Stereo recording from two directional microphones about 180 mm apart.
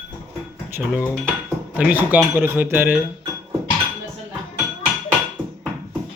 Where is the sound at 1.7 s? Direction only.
10° right (ahead or behind).